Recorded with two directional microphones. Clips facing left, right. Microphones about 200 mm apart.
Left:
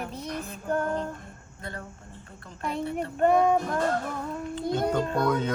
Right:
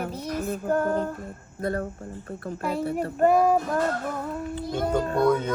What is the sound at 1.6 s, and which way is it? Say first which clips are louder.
Speech: right 12 dB; 50° right (ahead or behind).